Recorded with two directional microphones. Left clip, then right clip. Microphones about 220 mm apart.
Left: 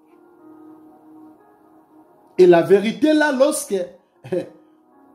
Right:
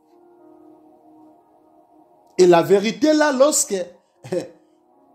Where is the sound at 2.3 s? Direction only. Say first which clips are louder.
Left 1 dB; 25° right (ahead or behind).